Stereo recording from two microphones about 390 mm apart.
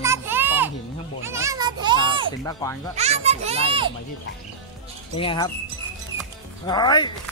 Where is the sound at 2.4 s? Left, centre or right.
Centre.